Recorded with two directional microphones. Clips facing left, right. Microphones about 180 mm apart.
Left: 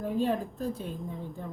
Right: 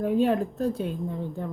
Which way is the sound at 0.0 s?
70° right (ahead or behind).